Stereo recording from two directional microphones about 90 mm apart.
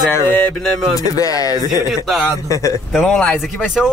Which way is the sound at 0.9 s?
40° left (ahead or behind).